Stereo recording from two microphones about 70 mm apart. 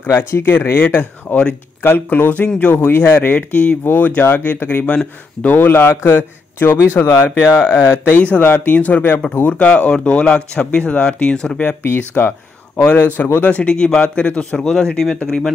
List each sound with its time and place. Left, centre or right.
0.0 s speech: left
2.7 s a man's voice: left
3.0 s a man's voice: left
12.1 s a man's voice: left; by 15.5 s centre